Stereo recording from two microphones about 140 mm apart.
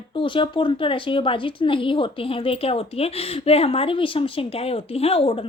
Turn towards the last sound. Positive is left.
turn(degrees=45)  # may be behind; listen again after turning